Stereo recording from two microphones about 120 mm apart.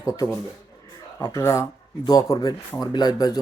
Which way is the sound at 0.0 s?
30° left (ahead or behind).